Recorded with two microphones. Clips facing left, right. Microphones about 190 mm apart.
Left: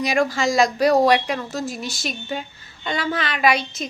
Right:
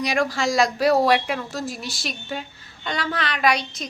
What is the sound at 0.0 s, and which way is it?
A woman's voice, centre (ahead or behind).